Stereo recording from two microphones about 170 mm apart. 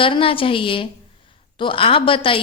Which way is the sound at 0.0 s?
30° left (ahead or behind).